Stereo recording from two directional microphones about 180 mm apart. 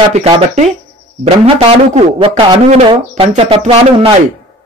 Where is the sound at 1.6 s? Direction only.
35° right (ahead or behind).